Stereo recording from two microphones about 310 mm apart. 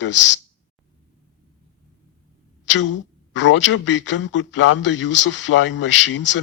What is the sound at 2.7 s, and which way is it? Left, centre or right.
Speech, left.